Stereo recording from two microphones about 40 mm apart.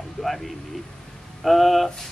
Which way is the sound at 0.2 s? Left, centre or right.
Left.